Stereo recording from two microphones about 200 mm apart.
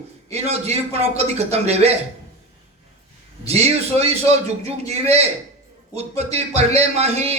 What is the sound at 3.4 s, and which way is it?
A man's voice, 30° right (ahead or behind).